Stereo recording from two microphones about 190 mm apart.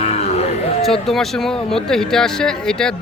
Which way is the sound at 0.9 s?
Centre (ahead or behind).